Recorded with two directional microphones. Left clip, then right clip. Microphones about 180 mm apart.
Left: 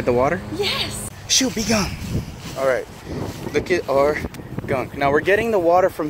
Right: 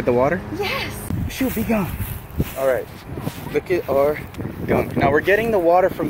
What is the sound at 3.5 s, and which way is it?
Speech, 5° left (ahead or behind).